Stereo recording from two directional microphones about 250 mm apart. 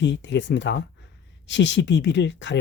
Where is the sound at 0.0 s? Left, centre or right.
Left.